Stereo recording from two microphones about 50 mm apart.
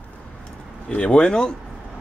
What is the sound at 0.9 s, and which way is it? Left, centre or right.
Speech, centre.